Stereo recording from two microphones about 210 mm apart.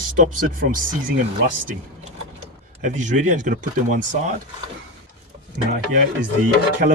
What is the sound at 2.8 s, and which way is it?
Speech, 35° right (ahead or behind).